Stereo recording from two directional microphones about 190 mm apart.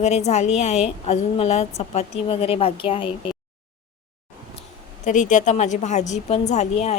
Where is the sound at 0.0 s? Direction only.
35° left (ahead or behind).